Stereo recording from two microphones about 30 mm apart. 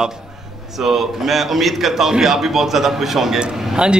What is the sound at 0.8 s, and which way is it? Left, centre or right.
A man's voice, centre.